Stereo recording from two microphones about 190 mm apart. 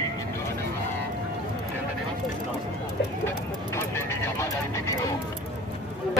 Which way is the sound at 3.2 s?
15° left (ahead or behind).